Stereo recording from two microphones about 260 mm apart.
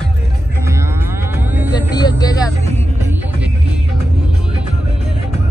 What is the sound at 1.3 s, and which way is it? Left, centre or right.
Vehicle, centre.